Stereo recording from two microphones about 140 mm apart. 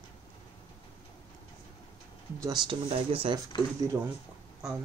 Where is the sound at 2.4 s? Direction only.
35° right (ahead or behind).